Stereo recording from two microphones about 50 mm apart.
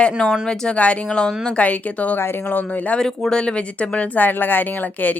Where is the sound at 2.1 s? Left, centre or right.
Left.